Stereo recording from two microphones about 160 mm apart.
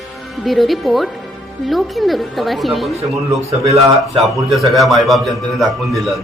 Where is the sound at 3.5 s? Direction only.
40° right (ahead or behind).